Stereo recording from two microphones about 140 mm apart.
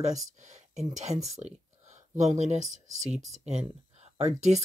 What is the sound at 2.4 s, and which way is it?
Speech, 55° right (ahead or behind).